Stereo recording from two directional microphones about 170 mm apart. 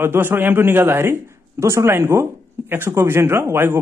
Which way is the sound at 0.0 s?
15° right (ahead or behind).